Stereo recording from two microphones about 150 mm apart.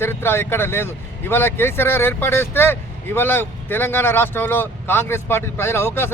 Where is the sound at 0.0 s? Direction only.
15° left (ahead or behind).